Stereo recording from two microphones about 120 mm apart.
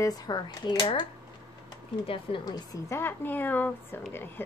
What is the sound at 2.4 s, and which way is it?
Speech, 30° left (ahead or behind).